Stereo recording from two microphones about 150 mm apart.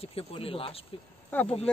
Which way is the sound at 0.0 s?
40° left (ahead or behind).